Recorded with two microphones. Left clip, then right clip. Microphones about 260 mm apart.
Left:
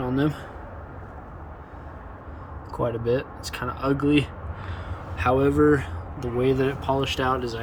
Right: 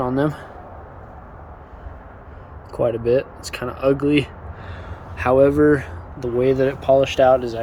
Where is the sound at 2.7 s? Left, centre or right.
Centre.